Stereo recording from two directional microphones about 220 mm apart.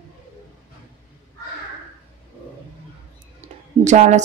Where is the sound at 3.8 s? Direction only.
35° right (ahead or behind).